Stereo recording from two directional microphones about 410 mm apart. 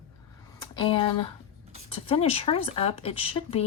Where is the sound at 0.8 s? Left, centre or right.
Centre.